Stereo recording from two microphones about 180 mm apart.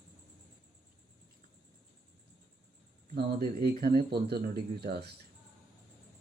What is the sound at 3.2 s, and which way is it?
Speech, 55° right (ahead or behind).